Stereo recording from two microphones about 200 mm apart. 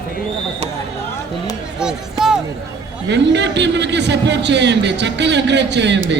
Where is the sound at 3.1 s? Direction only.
60° right (ahead or behind).